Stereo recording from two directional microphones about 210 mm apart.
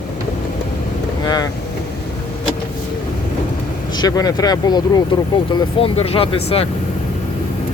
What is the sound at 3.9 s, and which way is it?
Speech, 20° left (ahead or behind).